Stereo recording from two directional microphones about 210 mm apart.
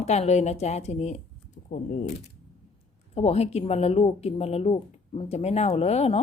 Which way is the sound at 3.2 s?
30° left (ahead or behind).